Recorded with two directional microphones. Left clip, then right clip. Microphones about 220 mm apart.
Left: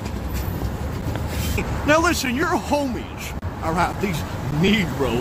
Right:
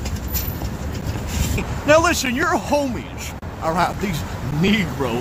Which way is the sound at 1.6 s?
20° right (ahead or behind).